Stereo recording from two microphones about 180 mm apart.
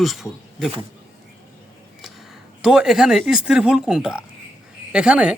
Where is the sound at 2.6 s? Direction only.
5° right (ahead or behind).